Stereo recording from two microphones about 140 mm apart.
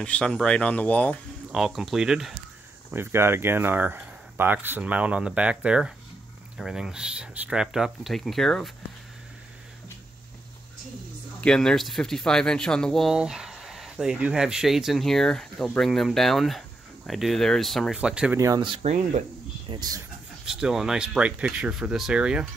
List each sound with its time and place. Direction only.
0.0 s speech: 10° left (ahead or behind)
1.5 s speech: centre (ahead or behind)
2.9 s speech: 15° right (ahead or behind); by 8.7 s 5° left (ahead or behind)
11.4 s speech: 5° left (ahead or behind)
18.6 s speech: 35° right (ahead or behind)
20.4 s speech: 5° right (ahead or behind)